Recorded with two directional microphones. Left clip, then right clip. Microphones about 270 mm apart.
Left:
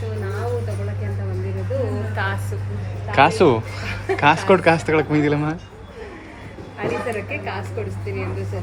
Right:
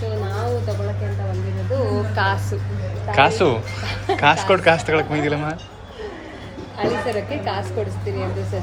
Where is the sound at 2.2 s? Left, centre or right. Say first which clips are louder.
Right 4 dB; right.